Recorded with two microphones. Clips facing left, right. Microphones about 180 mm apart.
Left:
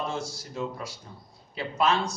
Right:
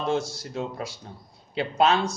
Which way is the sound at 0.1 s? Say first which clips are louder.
Right 7 dB; 70° right (ahead or behind).